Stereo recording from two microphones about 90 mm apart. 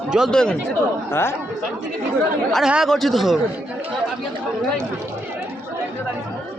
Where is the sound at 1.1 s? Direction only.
30° left (ahead or behind).